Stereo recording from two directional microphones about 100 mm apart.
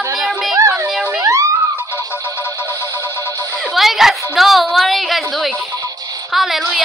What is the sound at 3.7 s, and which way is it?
A woman's voice, centre (ahead or behind).